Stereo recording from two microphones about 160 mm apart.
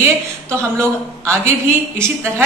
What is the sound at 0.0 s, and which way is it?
Speech, 15° right (ahead or behind).